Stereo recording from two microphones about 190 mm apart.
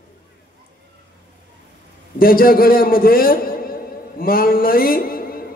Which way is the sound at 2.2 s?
50° left (ahead or behind).